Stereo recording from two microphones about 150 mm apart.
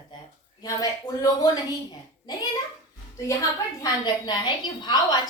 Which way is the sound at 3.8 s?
25° left (ahead or behind).